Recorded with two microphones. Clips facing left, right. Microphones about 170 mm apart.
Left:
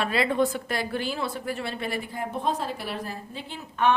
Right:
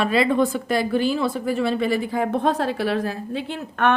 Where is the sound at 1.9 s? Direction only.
90° right.